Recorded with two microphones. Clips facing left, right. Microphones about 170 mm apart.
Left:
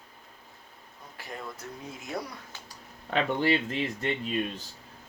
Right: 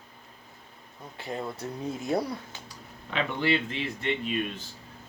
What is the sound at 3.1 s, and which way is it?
Speech, 40° left (ahead or behind).